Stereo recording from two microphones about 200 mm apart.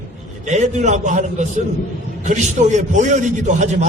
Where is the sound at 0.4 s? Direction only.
35° right (ahead or behind).